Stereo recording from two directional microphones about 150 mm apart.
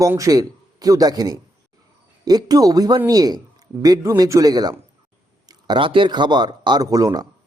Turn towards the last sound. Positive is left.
turn(degrees=-25)  # may be behind; listen again after turning